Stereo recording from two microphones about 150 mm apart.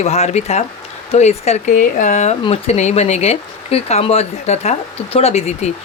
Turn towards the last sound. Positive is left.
turn(degrees=45)  # may be behind; listen again after turning